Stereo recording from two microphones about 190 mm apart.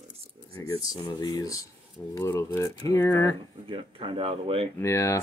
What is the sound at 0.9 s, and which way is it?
Speech, 20° left (ahead or behind).